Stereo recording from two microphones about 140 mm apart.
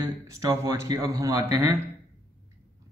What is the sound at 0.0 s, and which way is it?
Speech, 25° right (ahead or behind).